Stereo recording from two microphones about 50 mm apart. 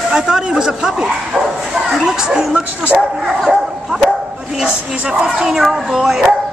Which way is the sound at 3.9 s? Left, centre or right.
Centre.